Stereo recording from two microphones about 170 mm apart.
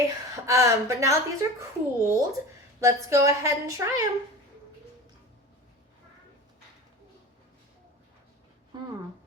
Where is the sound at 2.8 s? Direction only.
15° right (ahead or behind).